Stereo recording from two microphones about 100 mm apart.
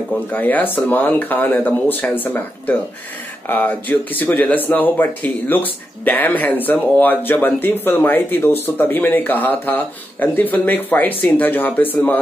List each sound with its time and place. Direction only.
0.3 s speech: 15° left (ahead or behind)